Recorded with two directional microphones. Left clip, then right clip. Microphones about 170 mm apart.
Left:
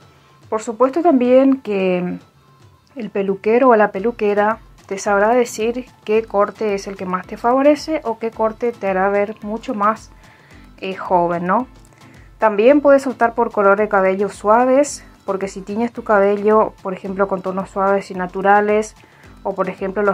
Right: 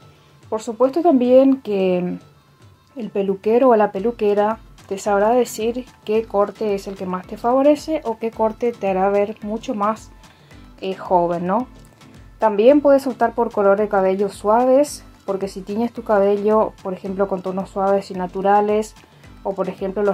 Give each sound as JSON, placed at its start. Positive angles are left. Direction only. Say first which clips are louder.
{"t": 0.5, "sound": "speech", "louder": "left 2 dB", "side_deg": 10}
{"t": 5.8, "sound": "speech", "louder": "left 3 dB", "side_deg": 40}
{"t": 6.2, "sound": "speech", "louder": "left 2 dB", "side_deg": 10}
{"t": 8.2, "sound": "speech", "louder": "left 1 dB", "side_deg": -5}
{"t": 9.7, "sound": "speech", "louder": "left 4 dB", "side_deg": 5}